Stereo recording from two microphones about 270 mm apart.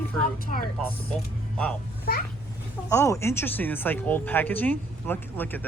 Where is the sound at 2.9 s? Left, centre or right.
Centre.